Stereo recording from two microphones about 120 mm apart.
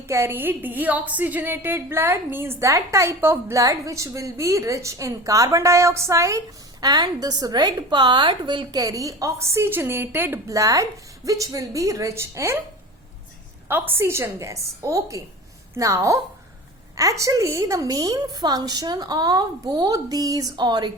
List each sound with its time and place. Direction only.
0.1 s a woman's voice: 20° right (ahead or behind)
13.7 s a woman's voice: 15° right (ahead or behind); by 20.9 s 40° right (ahead or behind)